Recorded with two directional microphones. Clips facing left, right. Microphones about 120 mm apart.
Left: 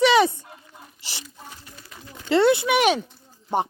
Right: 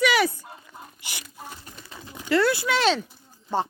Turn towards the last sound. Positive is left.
turn(degrees=20)  # may be behind; listen again after turning